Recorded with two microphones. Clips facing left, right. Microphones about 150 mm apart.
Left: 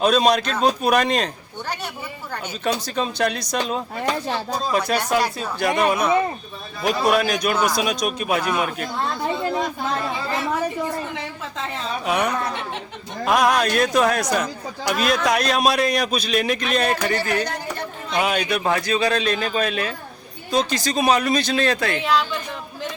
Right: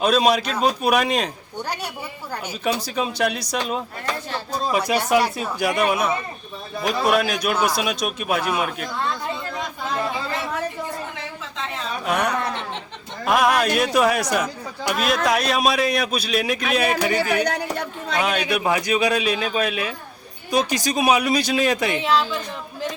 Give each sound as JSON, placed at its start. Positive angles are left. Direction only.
{"t": 0.0, "sound": "a man's voice", "side_deg": -5}
{"t": 2.3, "sound": "speech", "side_deg": -5}
{"t": 4.9, "sound": "a man's voice", "side_deg": -5}
{"t": 12.0, "sound": "a man's voice", "side_deg": 0}
{"t": 17.4, "sound": "speech", "side_deg": -70}
{"t": 18.2, "sound": "a man's voice", "side_deg": 5}
{"t": 18.4, "sound": "speech", "side_deg": -10}
{"t": 22.0, "sound": "a man's voice", "side_deg": 0}